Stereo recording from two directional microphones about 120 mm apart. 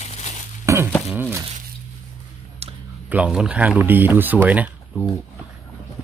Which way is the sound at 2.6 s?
60° right (ahead or behind).